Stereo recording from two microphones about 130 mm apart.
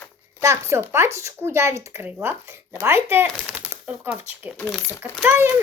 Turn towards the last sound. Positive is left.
turn(degrees=-15)  # may be behind; listen again after turning